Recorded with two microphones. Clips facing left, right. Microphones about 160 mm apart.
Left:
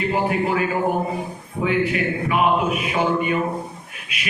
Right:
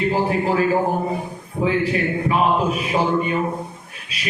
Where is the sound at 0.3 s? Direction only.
30° right (ahead or behind).